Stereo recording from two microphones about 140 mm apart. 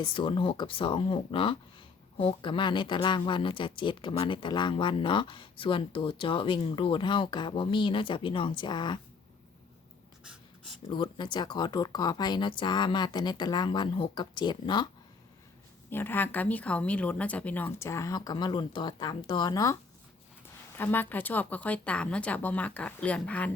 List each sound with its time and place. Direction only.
0.0 s speech: 35° left (ahead or behind)
10.8 s speech: 35° left (ahead or behind)
15.9 s speech: 15° left (ahead or behind)
20.7 s speech: 15° left (ahead or behind)